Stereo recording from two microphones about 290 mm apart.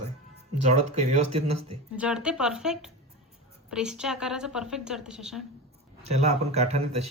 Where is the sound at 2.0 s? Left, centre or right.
Centre.